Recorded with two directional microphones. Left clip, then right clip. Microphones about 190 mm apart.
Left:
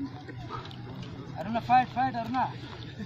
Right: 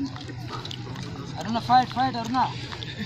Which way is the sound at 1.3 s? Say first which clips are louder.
Right 4 dB; 25° left (ahead or behind).